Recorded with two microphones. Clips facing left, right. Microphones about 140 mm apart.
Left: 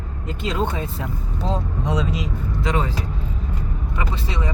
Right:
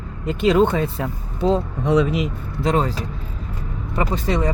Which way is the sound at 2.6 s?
35° right (ahead or behind).